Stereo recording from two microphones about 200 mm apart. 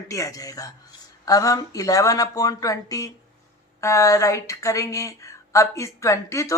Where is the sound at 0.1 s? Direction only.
15° left (ahead or behind).